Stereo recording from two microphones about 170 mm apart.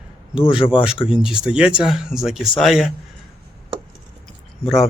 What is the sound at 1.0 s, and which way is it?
Speech, 5° right (ahead or behind).